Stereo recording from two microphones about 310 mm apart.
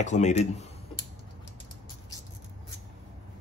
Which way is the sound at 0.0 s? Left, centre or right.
Left.